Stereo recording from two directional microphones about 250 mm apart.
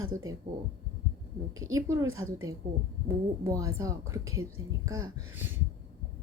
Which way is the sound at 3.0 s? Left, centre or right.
Centre.